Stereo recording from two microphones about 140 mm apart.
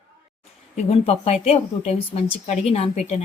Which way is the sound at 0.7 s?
50° left (ahead or behind).